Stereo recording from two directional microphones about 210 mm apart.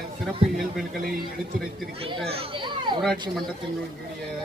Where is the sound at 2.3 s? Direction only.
25° right (ahead or behind).